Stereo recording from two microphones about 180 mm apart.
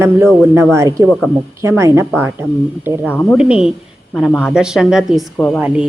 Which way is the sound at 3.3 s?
5° right (ahead or behind).